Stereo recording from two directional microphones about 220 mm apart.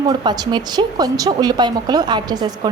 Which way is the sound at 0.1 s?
20° right (ahead or behind).